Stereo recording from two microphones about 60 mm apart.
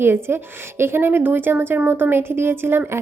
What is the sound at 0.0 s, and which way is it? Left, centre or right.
A woman's voice, right.